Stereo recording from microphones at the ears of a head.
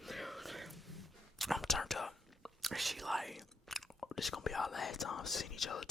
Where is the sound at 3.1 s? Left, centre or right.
Centre.